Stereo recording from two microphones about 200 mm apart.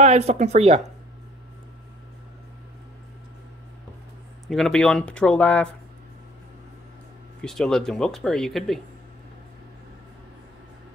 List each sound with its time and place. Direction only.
0.0 s speech: 35° right (ahead or behind)
4.5 s speech: centre (ahead or behind)
7.4 s speech: centre (ahead or behind)